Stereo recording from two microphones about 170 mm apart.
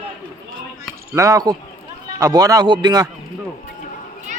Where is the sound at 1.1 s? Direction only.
20° right (ahead or behind).